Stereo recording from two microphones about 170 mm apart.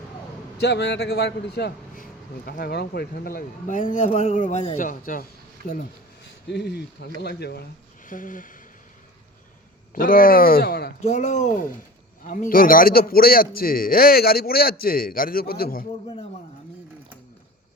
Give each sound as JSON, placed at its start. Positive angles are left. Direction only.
{"t": 0.6, "sound": "a man's voice", "side_deg": 90}
{"t": 6.5, "sound": "speech", "side_deg": 75}
{"t": 8.0, "sound": "a sound", "side_deg": 50}
{"t": 9.9, "sound": "a man's voice", "side_deg": 55}
{"t": 11.0, "sound": "a man's voice", "side_deg": 45}